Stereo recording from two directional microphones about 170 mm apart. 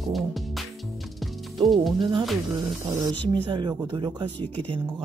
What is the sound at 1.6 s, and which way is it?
Speech, centre (ahead or behind).